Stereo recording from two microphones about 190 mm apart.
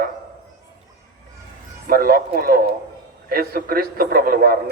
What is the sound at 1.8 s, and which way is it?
A man's voice, 50° right (ahead or behind).